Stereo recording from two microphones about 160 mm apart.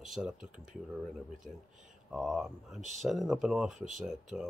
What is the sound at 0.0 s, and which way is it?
Speech, 5° right (ahead or behind).